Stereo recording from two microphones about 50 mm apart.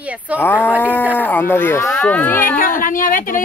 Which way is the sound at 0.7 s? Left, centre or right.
Right.